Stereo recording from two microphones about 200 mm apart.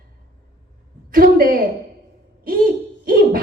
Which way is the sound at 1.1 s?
45° right (ahead or behind).